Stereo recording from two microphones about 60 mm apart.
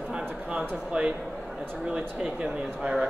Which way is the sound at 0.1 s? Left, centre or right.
Centre.